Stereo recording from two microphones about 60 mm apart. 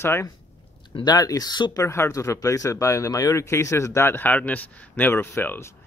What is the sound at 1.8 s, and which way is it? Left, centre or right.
Speech, left.